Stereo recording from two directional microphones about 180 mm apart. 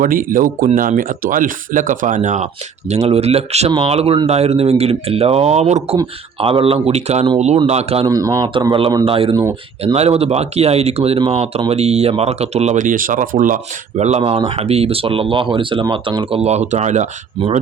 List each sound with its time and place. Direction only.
0.0 s speech: 50° right (ahead or behind)
8.0 s a man's voice: 20° right (ahead or behind); by 17.1 s 40° right (ahead or behind)